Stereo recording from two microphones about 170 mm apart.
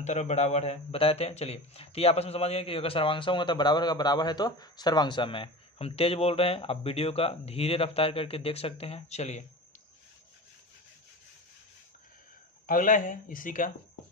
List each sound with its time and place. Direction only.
0.0 s speech: 40° left (ahead or behind)
12.6 s speech: 55° left (ahead or behind)